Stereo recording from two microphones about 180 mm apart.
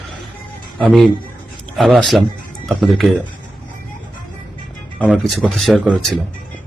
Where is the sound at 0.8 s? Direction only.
Centre (ahead or behind).